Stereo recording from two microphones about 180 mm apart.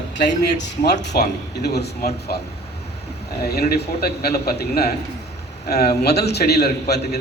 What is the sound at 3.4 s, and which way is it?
A man's voice, 60° left (ahead or behind).